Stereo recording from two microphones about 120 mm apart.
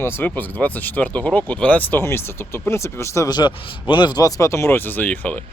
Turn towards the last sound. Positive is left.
turn(degrees=15)  # may be behind; listen again after turning